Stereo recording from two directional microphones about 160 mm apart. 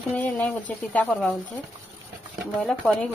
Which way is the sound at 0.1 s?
10° left (ahead or behind).